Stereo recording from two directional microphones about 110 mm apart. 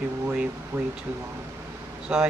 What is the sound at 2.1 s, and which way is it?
Speech, 10° right (ahead or behind).